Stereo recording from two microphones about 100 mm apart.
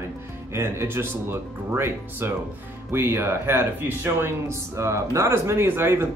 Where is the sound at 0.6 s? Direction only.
25° right (ahead or behind).